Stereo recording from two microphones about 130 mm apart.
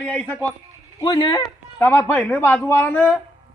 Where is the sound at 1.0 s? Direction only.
35° left (ahead or behind).